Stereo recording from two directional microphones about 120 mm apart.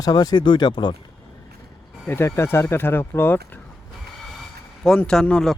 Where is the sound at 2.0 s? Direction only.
20° left (ahead or behind).